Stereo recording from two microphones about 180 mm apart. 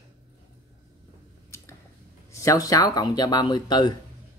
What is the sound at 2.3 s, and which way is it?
Speech, 15° left (ahead or behind).